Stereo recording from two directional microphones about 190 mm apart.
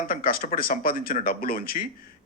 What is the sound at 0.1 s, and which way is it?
A woman's voice, 50° left (ahead or behind).